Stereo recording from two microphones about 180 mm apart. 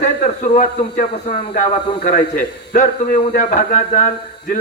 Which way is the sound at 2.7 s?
45° left (ahead or behind).